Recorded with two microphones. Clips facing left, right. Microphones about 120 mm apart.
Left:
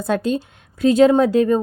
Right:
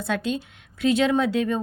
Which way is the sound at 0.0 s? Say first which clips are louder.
Left 6 dB; 40° left (ahead or behind).